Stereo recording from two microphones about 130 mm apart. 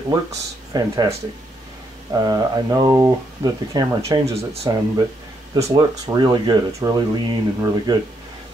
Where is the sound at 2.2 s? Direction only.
30° right (ahead or behind).